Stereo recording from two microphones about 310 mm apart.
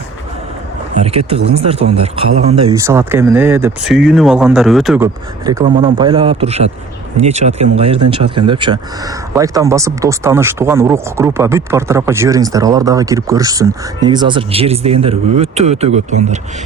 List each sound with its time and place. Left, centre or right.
0.9 s speech: centre
5.0 s a man's voice: centre